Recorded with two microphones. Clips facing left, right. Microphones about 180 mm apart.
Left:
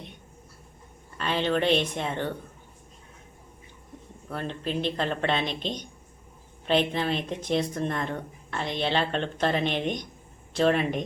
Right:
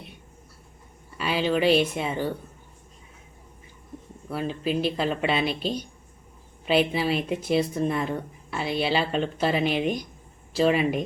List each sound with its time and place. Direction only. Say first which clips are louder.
1.2 s speech: right 2 dB; 5° right (ahead or behind)
4.3 s speech: right 4 dB; 5° right (ahead or behind)